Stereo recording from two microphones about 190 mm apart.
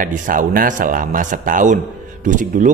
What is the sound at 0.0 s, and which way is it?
Speech, 45° right (ahead or behind).